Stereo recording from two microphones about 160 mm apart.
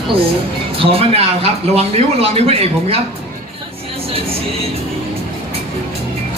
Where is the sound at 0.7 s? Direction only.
35° right (ahead or behind).